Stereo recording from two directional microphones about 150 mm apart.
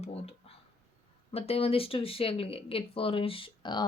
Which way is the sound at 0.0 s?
40° left (ahead or behind).